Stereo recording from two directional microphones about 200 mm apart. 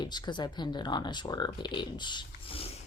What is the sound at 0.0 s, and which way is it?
Speech, 20° left (ahead or behind).